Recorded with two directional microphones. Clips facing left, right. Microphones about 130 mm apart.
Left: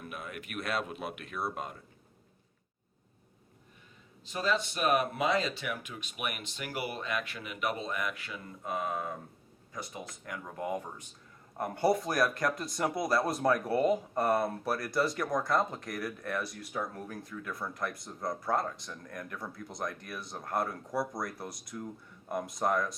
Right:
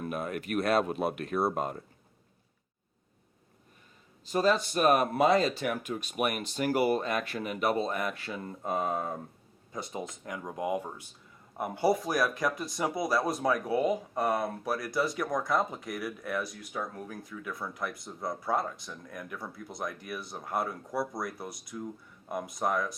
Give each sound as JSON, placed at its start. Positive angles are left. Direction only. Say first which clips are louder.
{"t": 0.0, "sound": "speech", "louder": "right 8 dB", "side_deg": -40}
{"t": 4.3, "sound": "speech", "louder": "right 5 dB", "side_deg": -40}